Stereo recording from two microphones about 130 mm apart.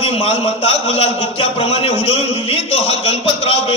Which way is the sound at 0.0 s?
50° left (ahead or behind).